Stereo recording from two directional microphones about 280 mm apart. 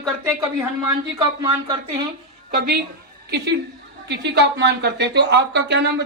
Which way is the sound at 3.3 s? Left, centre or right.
Right.